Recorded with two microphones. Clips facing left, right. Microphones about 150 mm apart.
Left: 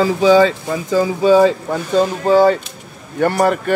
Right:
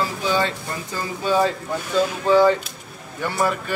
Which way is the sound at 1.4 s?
85° left.